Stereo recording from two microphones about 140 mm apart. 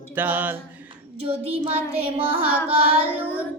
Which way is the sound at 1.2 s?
45° right (ahead or behind).